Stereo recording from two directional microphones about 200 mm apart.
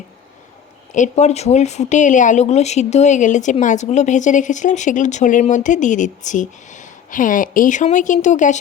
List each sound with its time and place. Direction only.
0.9 s speech: 35° left (ahead or behind)